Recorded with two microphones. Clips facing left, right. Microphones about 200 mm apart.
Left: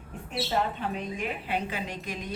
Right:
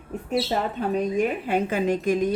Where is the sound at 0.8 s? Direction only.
45° right (ahead or behind).